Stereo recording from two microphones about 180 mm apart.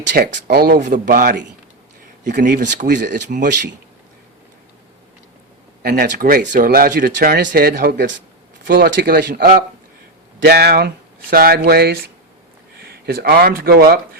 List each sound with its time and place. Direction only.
0.1 s speech: 50° right (ahead or behind)
2.4 s speech: 45° right (ahead or behind)
2.9 s speech: 70° right (ahead or behind)
3.2 s speech: 45° right (ahead or behind)
5.8 s speech: 55° right (ahead or behind)
8.6 s speech: 50° right (ahead or behind)
13.1 s speech: 60° right (ahead or behind)